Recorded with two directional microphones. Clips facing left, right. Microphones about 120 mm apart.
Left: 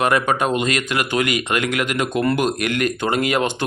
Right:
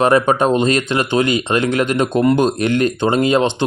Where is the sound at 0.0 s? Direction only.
30° right (ahead or behind).